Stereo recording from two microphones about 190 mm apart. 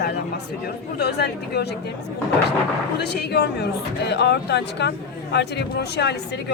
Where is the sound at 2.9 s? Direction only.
60° left (ahead or behind).